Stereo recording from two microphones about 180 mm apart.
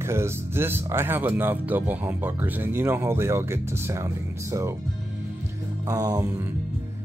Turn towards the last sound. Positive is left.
turn(degrees=-20)  # may be behind; listen again after turning